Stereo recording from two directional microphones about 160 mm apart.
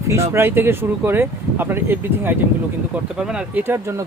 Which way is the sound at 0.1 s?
15° right (ahead or behind).